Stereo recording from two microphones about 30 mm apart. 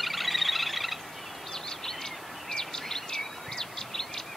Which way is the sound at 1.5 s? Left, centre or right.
Centre.